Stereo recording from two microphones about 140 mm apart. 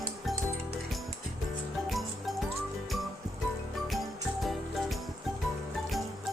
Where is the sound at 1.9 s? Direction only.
Centre (ahead or behind).